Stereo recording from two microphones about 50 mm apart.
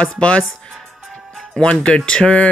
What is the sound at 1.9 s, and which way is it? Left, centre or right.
Speech, centre.